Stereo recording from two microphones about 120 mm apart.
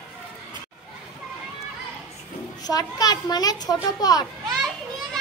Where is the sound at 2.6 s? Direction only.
35° left (ahead or behind).